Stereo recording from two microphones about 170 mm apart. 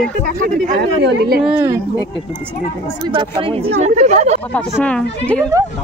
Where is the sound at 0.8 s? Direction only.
80° right.